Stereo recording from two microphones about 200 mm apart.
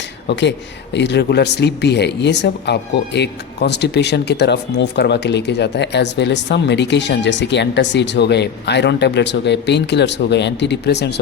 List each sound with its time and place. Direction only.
0.3 s speech: 60° left (ahead or behind)